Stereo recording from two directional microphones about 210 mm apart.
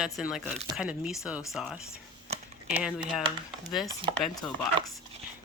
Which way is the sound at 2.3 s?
30° right (ahead or behind).